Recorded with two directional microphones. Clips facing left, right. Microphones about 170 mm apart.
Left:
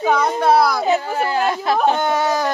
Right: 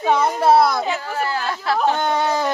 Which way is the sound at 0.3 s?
Centre (ahead or behind).